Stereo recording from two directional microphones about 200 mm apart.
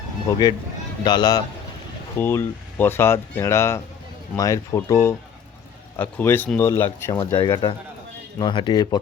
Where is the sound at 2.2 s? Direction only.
10° left (ahead or behind).